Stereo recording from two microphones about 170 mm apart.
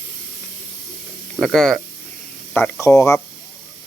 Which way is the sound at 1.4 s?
Centre (ahead or behind).